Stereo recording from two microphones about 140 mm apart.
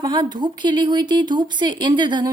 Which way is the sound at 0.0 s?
30° right (ahead or behind).